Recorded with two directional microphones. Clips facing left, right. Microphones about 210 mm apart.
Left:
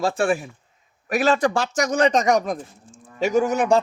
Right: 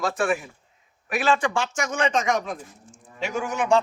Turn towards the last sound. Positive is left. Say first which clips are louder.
# left 4 dB
turn(degrees=40)  # may be behind; listen again after turning